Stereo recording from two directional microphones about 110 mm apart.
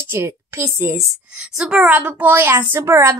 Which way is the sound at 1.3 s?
5° right (ahead or behind).